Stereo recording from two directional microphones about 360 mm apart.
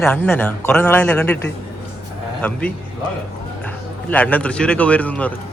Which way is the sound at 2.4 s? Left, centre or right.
Centre.